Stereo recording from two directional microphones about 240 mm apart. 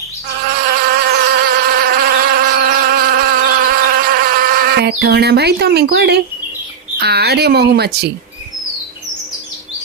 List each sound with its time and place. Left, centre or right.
0.6 s insect: right
7.0 s speech: right